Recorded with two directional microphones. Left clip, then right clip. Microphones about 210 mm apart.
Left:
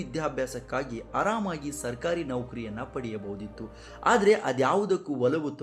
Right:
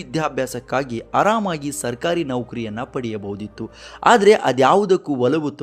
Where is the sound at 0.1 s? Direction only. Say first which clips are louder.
Right 9 dB; 50° right (ahead or behind).